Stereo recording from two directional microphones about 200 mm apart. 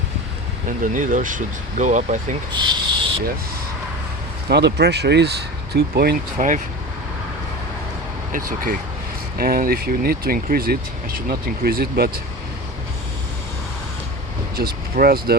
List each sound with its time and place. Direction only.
0.8 s speech: 40° right (ahead or behind)
2.5 s a sound: 20° right (ahead or behind)
4.4 s speech: 55° right (ahead or behind)
6.3 s speech: 40° right (ahead or behind)
8.3 s speech: 45° right (ahead or behind)
14.5 s speech: 50° right (ahead or behind)